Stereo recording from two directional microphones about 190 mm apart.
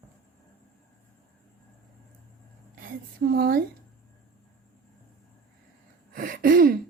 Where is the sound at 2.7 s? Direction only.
50° right (ahead or behind).